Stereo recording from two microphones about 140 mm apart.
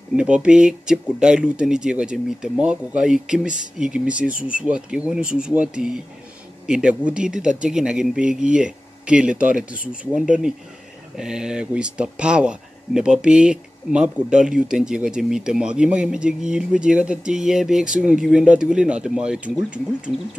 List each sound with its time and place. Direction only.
0.1 s speech: 5° right (ahead or behind)